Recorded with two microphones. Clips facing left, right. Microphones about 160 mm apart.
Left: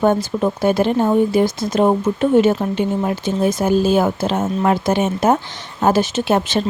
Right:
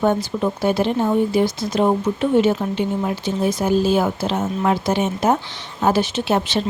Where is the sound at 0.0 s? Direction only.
50° left (ahead or behind).